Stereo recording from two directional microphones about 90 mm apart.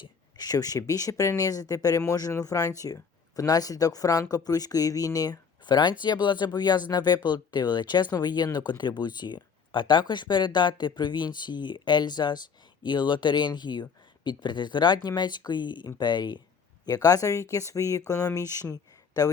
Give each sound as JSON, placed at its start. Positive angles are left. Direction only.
{"t": 0.0, "sound": "speech", "side_deg": 45}
{"t": 16.8, "sound": "speech", "side_deg": 45}